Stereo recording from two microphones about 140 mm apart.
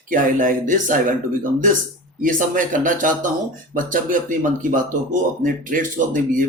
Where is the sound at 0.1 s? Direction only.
70° right (ahead or behind).